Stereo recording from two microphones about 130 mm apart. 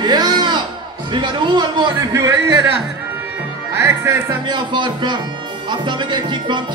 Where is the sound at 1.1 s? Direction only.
35° right (ahead or behind).